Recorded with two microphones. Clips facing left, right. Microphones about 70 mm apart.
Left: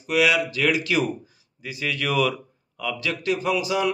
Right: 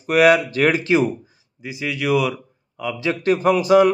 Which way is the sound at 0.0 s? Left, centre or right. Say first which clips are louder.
Right 6 dB; right.